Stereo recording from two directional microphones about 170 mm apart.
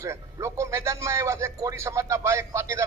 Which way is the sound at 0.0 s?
15° right (ahead or behind).